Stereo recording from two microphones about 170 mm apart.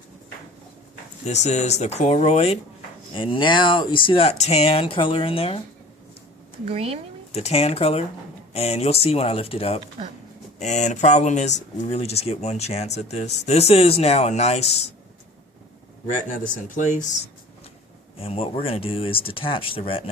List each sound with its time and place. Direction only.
1.2 s speech: 40° left (ahead or behind)
6.7 s speech: 35° right (ahead or behind)
7.3 s speech: 40° left (ahead or behind)
16.0 s speech: 45° left (ahead or behind)
18.2 s speech: 35° left (ahead or behind)